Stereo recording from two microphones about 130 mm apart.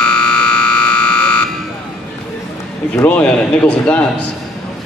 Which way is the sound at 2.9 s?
10° left (ahead or behind).